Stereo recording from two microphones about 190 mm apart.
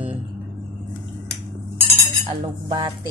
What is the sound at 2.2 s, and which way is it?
Cutlery, 25° right (ahead or behind).